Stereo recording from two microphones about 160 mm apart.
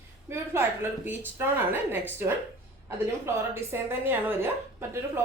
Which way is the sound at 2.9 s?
15° right (ahead or behind).